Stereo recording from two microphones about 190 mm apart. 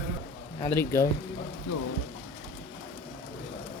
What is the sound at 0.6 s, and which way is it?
Speech, 15° left (ahead or behind).